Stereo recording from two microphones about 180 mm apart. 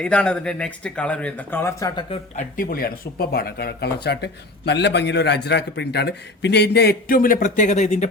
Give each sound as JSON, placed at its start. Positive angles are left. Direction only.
{"t": 0.0, "sound": "speech", "side_deg": 5}
{"t": 2.3, "sound": "speech", "side_deg": 50}